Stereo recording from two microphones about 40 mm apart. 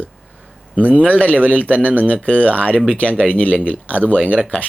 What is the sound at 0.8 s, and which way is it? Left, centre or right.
Speech, right.